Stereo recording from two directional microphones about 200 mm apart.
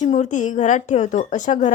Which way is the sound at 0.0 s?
35° left (ahead or behind).